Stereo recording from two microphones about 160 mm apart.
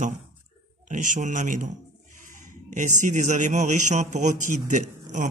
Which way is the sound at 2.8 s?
50° right (ahead or behind).